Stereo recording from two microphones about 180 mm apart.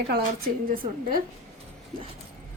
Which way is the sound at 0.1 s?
55° right (ahead or behind).